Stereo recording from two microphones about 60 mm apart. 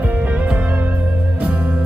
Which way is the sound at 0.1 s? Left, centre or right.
Right.